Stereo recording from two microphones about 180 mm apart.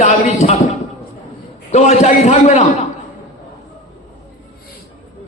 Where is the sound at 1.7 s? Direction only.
40° left (ahead or behind).